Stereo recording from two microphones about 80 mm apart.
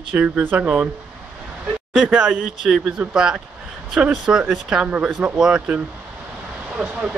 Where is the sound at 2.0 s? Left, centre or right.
Centre.